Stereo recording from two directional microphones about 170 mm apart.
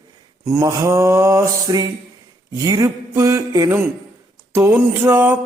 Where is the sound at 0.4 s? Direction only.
15° right (ahead or behind).